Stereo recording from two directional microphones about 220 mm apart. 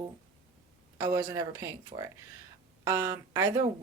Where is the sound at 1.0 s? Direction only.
15° right (ahead or behind).